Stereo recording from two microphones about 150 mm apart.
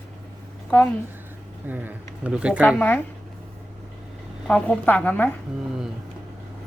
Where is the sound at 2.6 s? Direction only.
10° left (ahead or behind).